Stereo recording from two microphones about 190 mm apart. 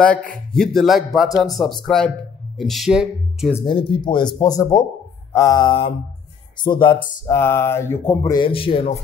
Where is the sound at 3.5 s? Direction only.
25° left (ahead or behind).